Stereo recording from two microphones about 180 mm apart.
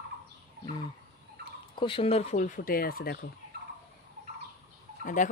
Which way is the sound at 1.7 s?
30° left (ahead or behind).